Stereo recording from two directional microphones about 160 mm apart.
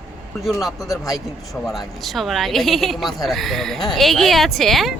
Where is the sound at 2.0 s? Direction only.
Centre (ahead or behind).